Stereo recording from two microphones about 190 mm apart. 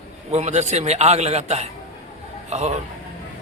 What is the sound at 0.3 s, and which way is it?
A man's voice, 35° right (ahead or behind).